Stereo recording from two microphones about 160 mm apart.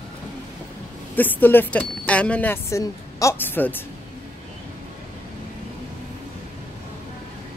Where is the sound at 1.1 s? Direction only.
10° left (ahead or behind).